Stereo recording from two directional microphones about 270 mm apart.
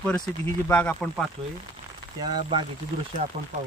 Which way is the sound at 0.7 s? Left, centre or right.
Centre.